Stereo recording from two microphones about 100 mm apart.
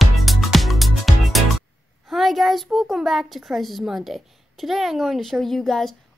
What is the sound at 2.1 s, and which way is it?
A woman's voice, centre (ahead or behind).